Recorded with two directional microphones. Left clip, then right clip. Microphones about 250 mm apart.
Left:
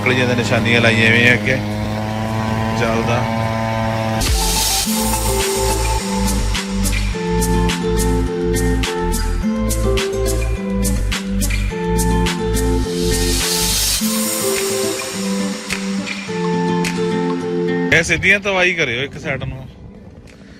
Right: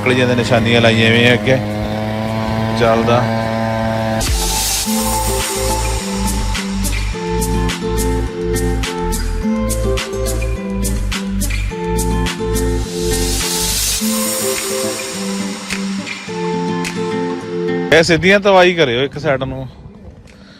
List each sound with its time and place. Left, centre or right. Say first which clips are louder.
0.0 s a man's voice: right 2 dB; centre
2.1 s vehicle: right 2 dB; right
2.7 s a man's voice: right 7 dB; centre
3.2 s mantra: right 2 dB; right
12.1 s music: even; centre
16.6 s music: left 1 dB; centre
17.9 s a man's voice: right 4 dB; centre